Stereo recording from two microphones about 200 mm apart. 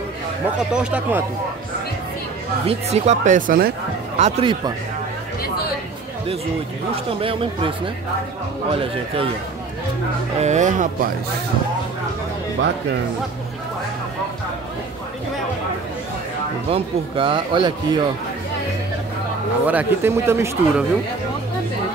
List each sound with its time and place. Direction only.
0.7 s speech: 5° right (ahead or behind)
2.6 s speech: 30° right (ahead or behind)
4.2 s speech: 25° right (ahead or behind)
7.1 s speech: 25° right (ahead or behind)
10.4 s speech: 35° right (ahead or behind)
16.6 s speech: 30° right (ahead or behind)
19.6 s speech: 10° right (ahead or behind)